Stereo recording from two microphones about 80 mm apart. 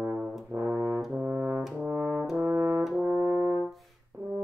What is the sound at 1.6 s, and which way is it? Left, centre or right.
Brass instrument, centre.